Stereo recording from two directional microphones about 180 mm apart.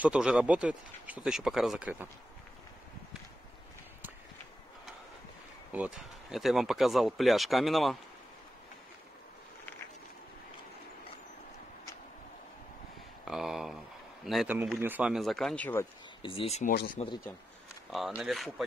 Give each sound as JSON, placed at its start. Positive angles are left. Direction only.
{"t": 0.0, "sound": "speech", "side_deg": -5}
{"t": 5.7, "sound": "speech", "side_deg": -5}
{"t": 13.3, "sound": "speech", "side_deg": 0}
{"t": 16.2, "sound": "speech", "side_deg": 30}
{"t": 16.7, "sound": "speech", "side_deg": 50}
{"t": 17.9, "sound": "speech", "side_deg": 0}